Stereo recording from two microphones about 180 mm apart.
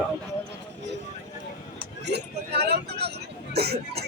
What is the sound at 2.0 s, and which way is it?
Vehicle, 65° right (ahead or behind).